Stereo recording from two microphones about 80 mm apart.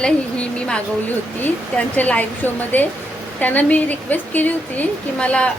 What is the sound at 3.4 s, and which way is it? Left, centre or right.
A woman's voice, centre.